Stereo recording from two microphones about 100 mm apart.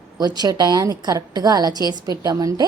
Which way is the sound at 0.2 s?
45° right (ahead or behind).